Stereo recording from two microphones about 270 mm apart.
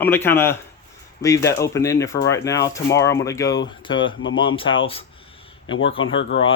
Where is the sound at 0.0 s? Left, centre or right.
Centre.